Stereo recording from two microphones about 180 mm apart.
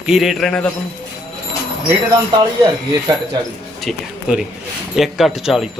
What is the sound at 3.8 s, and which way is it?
Speech, centre (ahead or behind).